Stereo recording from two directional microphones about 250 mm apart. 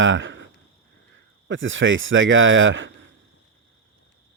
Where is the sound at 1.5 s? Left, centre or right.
Right.